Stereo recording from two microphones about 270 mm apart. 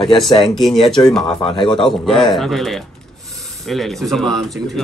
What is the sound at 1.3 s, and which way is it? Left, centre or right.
Speech, centre.